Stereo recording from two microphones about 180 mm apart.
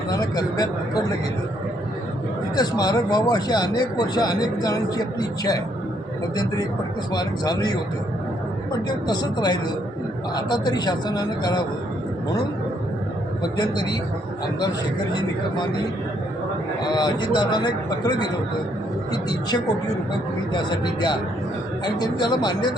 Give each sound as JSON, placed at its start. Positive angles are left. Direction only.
{"t": 0.1, "sound": "speech", "side_deg": 20}
{"t": 2.6, "sound": "speech", "side_deg": 20}
{"t": 7.1, "sound": "speech", "side_deg": 20}
{"t": 9.0, "sound": "speech", "side_deg": 25}
{"t": 13.4, "sound": "speech", "side_deg": 25}
{"t": 16.8, "sound": "speech", "side_deg": 25}
{"t": 19.3, "sound": "speech", "side_deg": 20}